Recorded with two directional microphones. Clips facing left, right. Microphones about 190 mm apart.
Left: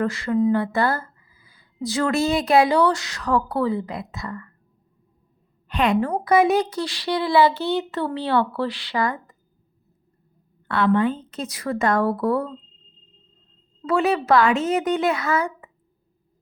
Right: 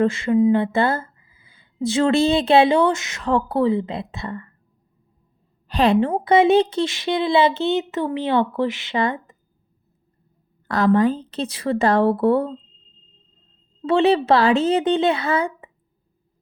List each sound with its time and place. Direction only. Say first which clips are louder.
0.0 s speech: right 4 dB; 25° right (ahead or behind)
5.6 s speech: right 3 dB; 35° right (ahead or behind)
10.7 s speech: right 3 dB; 40° right (ahead or behind)
13.8 s speech: right 4 dB; 30° right (ahead or behind)